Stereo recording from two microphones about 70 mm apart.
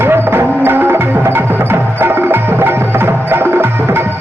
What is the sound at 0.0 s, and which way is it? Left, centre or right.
Music, right.